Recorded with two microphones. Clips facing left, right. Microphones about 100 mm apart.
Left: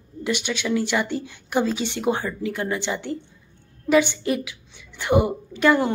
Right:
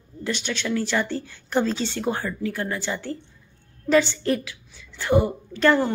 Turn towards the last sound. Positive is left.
turn(degrees=10)  # may be behind; listen again after turning